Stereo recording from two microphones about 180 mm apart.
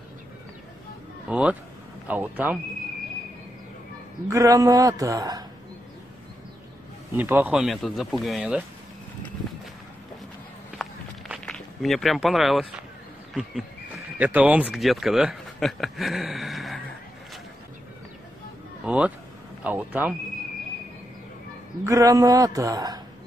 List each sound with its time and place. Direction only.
1.3 s speech: 10° right (ahead or behind)
4.3 s a man's voice: 20° right (ahead or behind)
7.2 s speech: 10° right (ahead or behind)
10.8 s walk: centre (ahead or behind)
13.3 s speech: centre (ahead or behind)
18.9 s speech: 5° right (ahead or behind)
19.6 s a sound: 10° right (ahead or behind)
21.8 s a man's voice: 20° right (ahead or behind)